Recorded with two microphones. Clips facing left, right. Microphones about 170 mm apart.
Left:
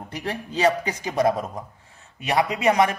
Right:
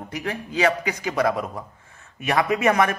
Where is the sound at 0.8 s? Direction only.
25° left (ahead or behind).